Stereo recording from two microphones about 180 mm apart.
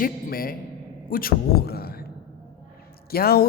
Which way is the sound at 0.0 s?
55° left (ahead or behind).